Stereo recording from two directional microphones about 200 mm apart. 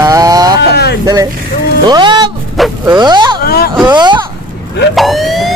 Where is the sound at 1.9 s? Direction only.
20° right (ahead or behind).